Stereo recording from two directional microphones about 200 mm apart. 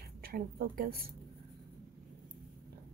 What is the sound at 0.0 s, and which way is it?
Speech, 50° right (ahead or behind).